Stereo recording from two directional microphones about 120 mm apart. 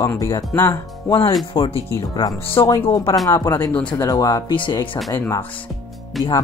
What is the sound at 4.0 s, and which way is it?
Speech, 30° left (ahead or behind).